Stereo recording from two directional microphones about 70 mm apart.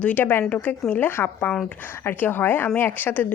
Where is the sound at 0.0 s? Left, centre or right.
Left.